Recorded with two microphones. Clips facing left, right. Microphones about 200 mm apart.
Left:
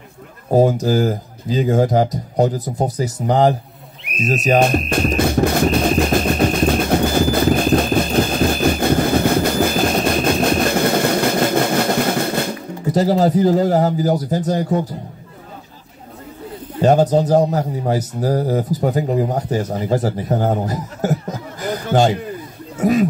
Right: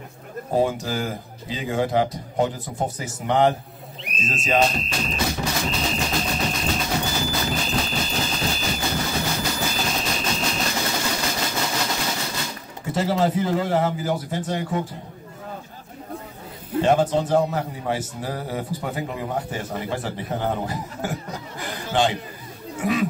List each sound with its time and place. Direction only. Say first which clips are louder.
0.5 s a man's voice: left 8 dB; 40° left (ahead or behind)
4.0 s a sound: left 7 dB; 60° left (ahead or behind)
4.6 s music: left 3 dB; 55° left (ahead or behind)
12.9 s a man's voice: left 6 dB; 40° left (ahead or behind)
16.8 s a man's voice: left 6 dB; 40° left (ahead or behind)